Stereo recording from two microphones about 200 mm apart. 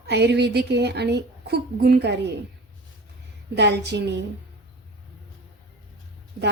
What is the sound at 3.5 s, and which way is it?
Speech, 60° right (ahead or behind).